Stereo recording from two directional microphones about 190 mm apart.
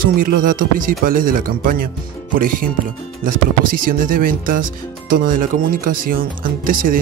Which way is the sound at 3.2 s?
45° right (ahead or behind).